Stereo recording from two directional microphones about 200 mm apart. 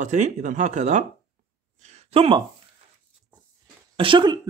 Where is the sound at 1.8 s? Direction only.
35° right (ahead or behind).